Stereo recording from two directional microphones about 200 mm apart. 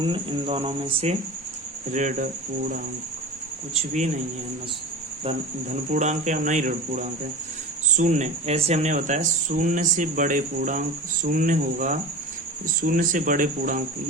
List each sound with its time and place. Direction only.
0.0 s speech: 25° right (ahead or behind)
1.9 s speech: 40° right (ahead or behind)
3.8 s speech: 35° right (ahead or behind)
5.2 s speech: 35° right (ahead or behind)